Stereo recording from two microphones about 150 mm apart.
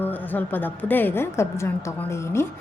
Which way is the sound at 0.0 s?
10° left (ahead or behind).